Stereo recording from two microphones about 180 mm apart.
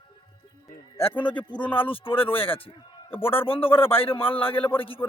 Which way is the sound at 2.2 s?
10° left (ahead or behind).